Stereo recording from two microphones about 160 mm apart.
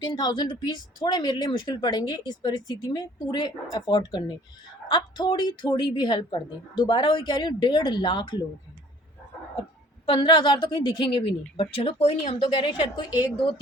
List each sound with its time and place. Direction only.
0.0 s speech: 25° left (ahead or behind)
10.1 s a woman's voice: 30° left (ahead or behind)